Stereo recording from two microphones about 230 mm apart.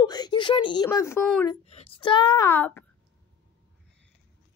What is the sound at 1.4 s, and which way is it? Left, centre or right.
A child's voice, left.